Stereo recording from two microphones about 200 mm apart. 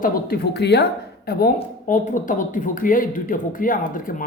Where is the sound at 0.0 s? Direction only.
50° left (ahead or behind).